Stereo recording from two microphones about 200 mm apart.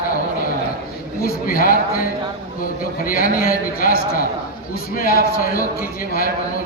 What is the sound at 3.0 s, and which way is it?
A man's voice, 45° left (ahead or behind).